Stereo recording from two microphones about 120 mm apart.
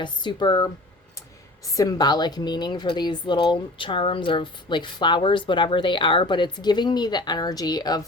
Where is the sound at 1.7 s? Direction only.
30° left (ahead or behind).